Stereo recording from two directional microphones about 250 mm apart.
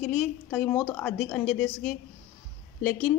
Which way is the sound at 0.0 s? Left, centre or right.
Centre.